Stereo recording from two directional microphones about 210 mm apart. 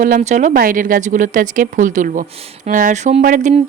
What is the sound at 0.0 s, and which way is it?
A woman's voice, 35° right (ahead or behind).